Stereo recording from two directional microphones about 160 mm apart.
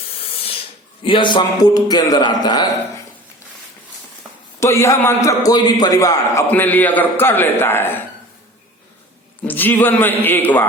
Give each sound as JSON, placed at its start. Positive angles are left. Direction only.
{"t": 1.0, "sound": "a man's voice", "side_deg": 30}
{"t": 4.6, "sound": "a man's voice", "side_deg": 15}
{"t": 6.5, "sound": "a man's voice", "side_deg": 10}
{"t": 9.5, "sound": "a man's voice", "side_deg": 10}